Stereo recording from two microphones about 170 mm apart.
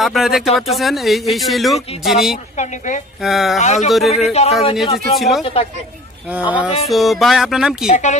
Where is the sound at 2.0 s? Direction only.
Centre (ahead or behind).